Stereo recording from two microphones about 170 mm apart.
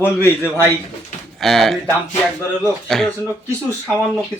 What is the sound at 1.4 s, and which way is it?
Speech, centre (ahead or behind).